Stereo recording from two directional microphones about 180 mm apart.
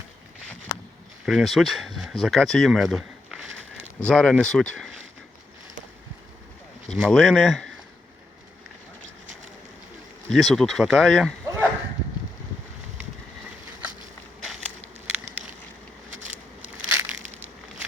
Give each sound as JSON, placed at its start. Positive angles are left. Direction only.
{"t": 1.2, "sound": "speech", "side_deg": 0}
{"t": 6.9, "sound": "speech", "side_deg": 0}
{"t": 10.2, "sound": "speech", "side_deg": 0}
{"t": 11.4, "sound": "a sound", "side_deg": -15}
{"t": 16.1, "sound": "a sound", "side_deg": -40}
{"t": 16.9, "sound": "crushing", "side_deg": -10}